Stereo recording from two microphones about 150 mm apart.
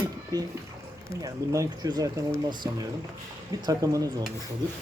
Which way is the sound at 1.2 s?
20° right (ahead or behind).